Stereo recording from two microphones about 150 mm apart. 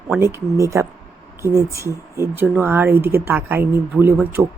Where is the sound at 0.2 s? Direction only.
15° right (ahead or behind).